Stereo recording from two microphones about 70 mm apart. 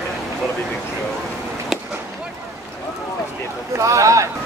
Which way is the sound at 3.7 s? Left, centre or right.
Right.